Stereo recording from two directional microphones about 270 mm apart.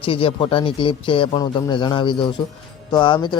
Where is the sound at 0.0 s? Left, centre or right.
Centre.